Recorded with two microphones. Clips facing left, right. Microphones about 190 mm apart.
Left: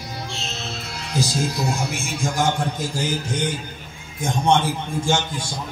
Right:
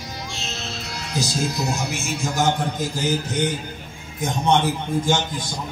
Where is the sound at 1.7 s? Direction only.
30° left (ahead or behind).